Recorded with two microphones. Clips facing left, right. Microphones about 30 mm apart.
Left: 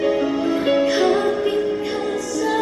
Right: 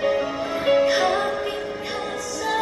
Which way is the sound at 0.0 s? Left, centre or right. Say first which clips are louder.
Left 4 dB; centre.